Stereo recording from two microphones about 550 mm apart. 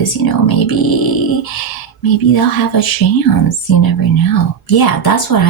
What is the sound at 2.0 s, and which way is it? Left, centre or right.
Speech, left.